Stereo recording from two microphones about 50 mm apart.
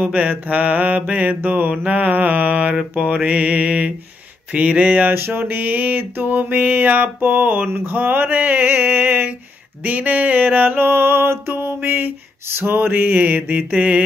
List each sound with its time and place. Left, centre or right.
0.0 s mantra: right
5.1 s mantra: right
12.4 s a sound: right
13.7 s mantra: right